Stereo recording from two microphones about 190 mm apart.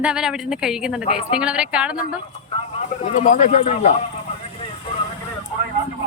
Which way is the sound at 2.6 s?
35° left (ahead or behind).